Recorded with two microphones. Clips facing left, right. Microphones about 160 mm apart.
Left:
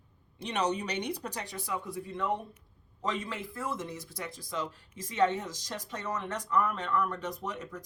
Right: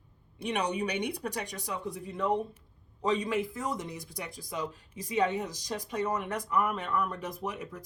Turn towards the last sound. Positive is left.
turn(degrees=-10)  # may be behind; listen again after turning